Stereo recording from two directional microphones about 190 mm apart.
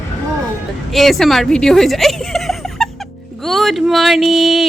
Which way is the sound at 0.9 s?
Centre (ahead or behind).